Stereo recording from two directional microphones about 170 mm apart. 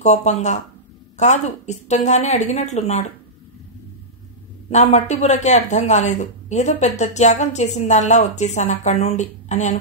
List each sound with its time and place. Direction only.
0.0 s speech: 40° left (ahead or behind)
4.6 s speech: 40° left (ahead or behind)